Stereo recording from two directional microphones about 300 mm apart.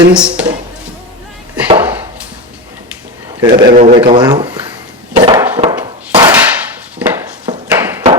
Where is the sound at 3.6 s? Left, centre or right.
Right.